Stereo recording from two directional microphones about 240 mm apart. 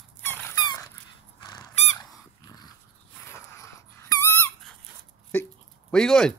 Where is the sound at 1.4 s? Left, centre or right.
Centre.